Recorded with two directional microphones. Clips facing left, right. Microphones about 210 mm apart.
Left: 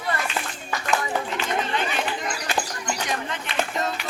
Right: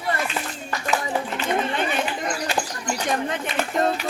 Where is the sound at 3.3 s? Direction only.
50° right (ahead or behind).